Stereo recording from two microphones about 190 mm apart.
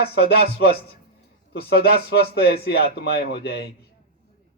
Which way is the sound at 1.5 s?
55° left (ahead or behind).